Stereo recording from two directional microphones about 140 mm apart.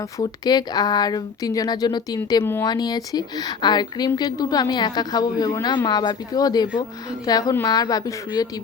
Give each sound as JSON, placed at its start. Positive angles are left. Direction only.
{"t": 0.2, "sound": "a woman's voice", "side_deg": 30}
{"t": 2.6, "sound": "a woman's voice", "side_deg": 30}